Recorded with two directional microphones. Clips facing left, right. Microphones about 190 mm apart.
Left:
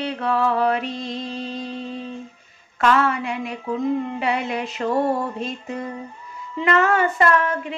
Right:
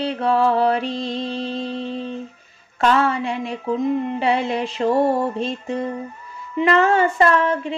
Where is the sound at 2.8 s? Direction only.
30° right (ahead or behind).